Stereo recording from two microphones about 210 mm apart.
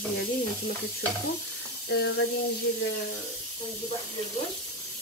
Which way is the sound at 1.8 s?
55° left (ahead or behind).